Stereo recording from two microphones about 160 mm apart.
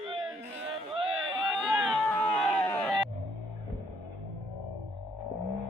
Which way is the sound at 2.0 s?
10° left (ahead or behind).